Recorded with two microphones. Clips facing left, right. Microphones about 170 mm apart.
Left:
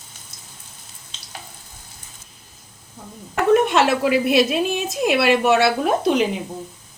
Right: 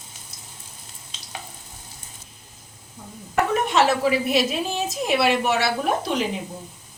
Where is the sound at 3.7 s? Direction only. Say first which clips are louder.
Left 2 dB; 60° left (ahead or behind).